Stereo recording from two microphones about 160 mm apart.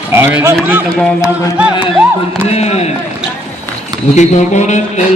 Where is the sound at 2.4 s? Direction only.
40° left (ahead or behind).